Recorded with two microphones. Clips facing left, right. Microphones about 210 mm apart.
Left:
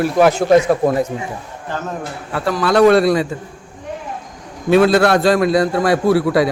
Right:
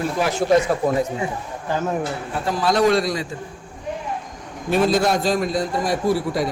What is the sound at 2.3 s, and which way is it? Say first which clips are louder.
Speech: left 6 dB; 70° left (ahead or behind).